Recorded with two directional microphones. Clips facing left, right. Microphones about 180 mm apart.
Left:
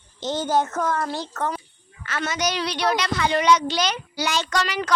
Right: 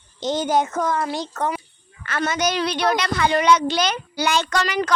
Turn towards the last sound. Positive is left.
turn(degrees=-55)  # may be behind; listen again after turning